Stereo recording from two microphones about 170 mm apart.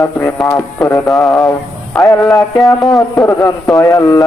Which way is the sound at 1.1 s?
Centre (ahead or behind).